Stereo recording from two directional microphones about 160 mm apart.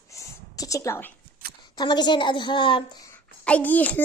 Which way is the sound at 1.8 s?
25° left (ahead or behind).